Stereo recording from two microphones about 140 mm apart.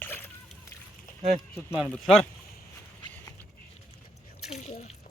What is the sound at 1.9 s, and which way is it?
Speech, 5° left (ahead or behind).